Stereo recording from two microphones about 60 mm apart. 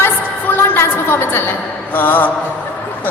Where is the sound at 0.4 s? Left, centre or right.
Left.